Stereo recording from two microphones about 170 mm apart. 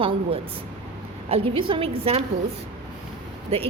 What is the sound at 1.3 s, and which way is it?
Speech, 30° right (ahead or behind).